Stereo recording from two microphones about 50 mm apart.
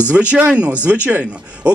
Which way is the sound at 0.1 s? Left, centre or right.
Right.